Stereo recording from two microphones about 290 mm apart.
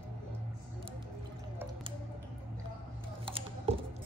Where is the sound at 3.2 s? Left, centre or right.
Centre.